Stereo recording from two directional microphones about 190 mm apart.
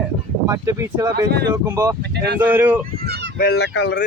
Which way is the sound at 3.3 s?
60° left (ahead or behind).